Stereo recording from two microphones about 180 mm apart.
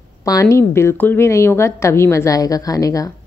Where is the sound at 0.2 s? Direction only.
20° left (ahead or behind).